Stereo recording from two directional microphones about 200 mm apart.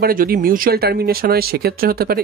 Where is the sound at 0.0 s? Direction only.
45° right (ahead or behind).